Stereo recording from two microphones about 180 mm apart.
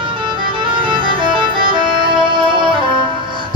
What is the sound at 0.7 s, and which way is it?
Music, 25° right (ahead or behind).